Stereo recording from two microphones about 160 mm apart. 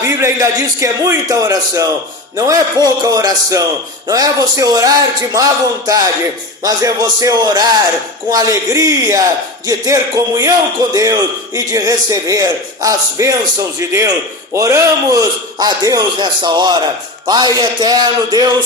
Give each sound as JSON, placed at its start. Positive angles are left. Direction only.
{"t": 0.0, "sound": "a man's voice", "side_deg": -15}